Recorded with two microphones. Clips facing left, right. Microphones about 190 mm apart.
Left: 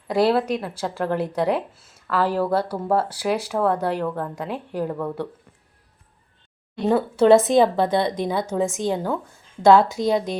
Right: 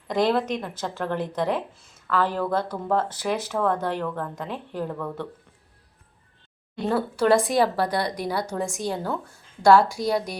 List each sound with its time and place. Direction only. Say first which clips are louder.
0.1 s a woman's voice: left 3 dB; 5° left (ahead or behind)
6.8 s a woman's voice: left 5 dB; 20° left (ahead or behind)